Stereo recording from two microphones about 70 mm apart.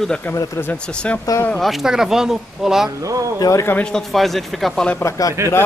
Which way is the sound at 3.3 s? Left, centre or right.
Left.